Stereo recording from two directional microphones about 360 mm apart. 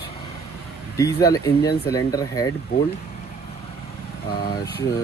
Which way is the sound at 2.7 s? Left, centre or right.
Left.